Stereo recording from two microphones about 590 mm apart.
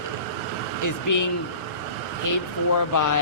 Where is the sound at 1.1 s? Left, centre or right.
Left.